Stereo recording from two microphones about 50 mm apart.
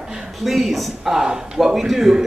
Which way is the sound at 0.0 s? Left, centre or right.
Centre.